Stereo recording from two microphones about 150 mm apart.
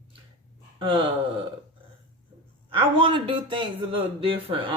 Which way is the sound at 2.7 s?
35° right (ahead or behind).